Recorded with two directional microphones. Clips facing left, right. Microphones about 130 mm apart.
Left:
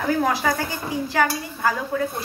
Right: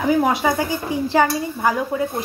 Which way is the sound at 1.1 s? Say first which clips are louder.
Right 5 dB; 25° right (ahead or behind).